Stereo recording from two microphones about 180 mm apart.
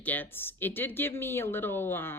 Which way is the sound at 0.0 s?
10° left (ahead or behind).